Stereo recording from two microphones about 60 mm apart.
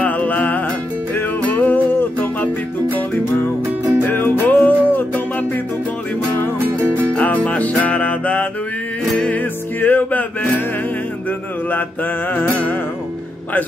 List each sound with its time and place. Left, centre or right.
0.0 s music: left
4.0 s music: left
6.6 s music: right
7.2 s music: left
11.7 s music: left